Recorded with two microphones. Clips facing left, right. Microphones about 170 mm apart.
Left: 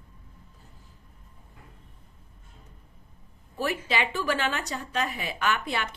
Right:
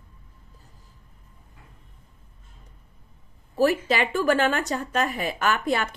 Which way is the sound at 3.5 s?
45° right (ahead or behind).